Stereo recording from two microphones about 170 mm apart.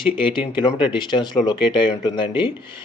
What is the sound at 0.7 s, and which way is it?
Speech, 30° left (ahead or behind).